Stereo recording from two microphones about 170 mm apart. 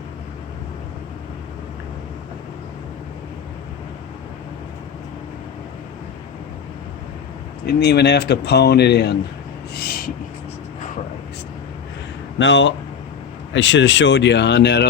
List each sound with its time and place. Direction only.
7.7 s speech: 75° left (ahead or behind)
9.7 s a sound: 65° left (ahead or behind)
12.4 s speech: 90° left